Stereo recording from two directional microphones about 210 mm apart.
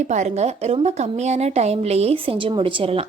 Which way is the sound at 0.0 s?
35° right (ahead or behind).